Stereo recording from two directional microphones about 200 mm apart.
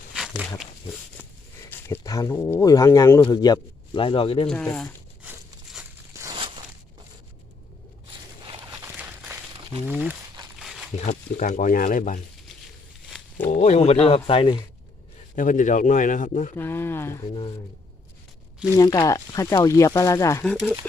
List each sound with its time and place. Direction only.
0.1 s wild animals: 5° right (ahead or behind)
1.7 s speech: 15° left (ahead or behind)
4.4 s speech: 10° left (ahead or behind)
6.1 s a sound: 15° right (ahead or behind)
8.7 s a sound: 10° right (ahead or behind)
9.8 s speech: 10° right (ahead or behind)
10.6 s a sound: centre (ahead or behind)
11.0 s speech: 40° left (ahead or behind)
13.1 s a sound: centre (ahead or behind)
13.5 s speech: 35° left (ahead or behind)
15.4 s speech: 40° left (ahead or behind)
16.6 s speech: 10° left (ahead or behind)
18.8 s speech: 15° left (ahead or behind)
20.4 s speech: 5° left (ahead or behind)